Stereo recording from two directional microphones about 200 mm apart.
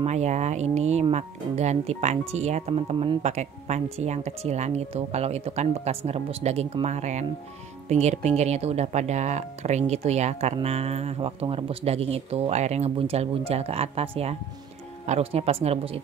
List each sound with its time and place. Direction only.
0.0 s speech: 35° right (ahead or behind)